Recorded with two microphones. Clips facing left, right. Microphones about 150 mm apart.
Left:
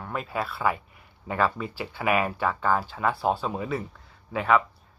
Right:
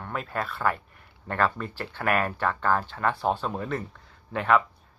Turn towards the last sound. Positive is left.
turn(degrees=0)  # may be behind; listen again after turning